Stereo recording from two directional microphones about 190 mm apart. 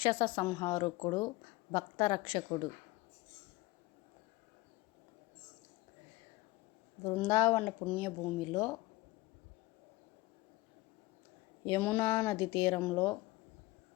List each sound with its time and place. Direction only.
0.0 s speech: 20° left (ahead or behind)
7.1 s speech: 15° left (ahead or behind)
11.6 s speech: 15° left (ahead or behind)